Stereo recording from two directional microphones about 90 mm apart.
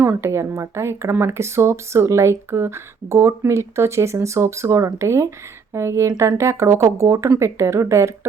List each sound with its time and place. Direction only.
0.0 s speech: 30° right (ahead or behind)